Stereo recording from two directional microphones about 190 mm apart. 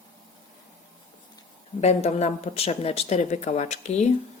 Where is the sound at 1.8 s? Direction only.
35° left (ahead or behind).